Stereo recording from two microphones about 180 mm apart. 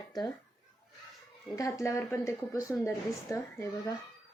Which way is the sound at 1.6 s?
15° left (ahead or behind).